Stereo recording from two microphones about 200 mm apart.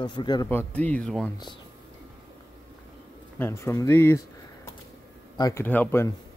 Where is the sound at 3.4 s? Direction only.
15° left (ahead or behind).